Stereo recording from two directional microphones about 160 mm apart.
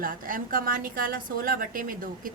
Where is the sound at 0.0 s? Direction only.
60° right (ahead or behind).